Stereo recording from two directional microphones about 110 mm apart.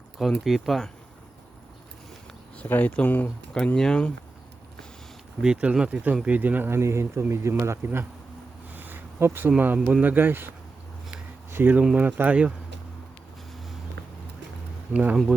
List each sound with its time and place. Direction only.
0.2 s speech: centre (ahead or behind)
2.6 s speech: 15° left (ahead or behind)
5.4 s speech: 10° right (ahead or behind)
8.7 s a sound: 15° right (ahead or behind)
9.6 s speech: 15° right (ahead or behind)
11.5 s speech: 15° right (ahead or behind)
14.9 s speech: 10° right (ahead or behind)